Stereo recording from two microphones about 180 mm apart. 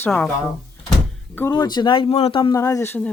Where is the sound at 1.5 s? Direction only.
25° left (ahead or behind).